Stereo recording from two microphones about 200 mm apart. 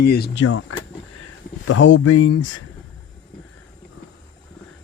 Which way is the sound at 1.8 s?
70° left (ahead or behind).